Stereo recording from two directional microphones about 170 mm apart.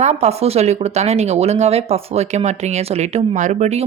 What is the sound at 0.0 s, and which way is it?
Speech, 40° right (ahead or behind).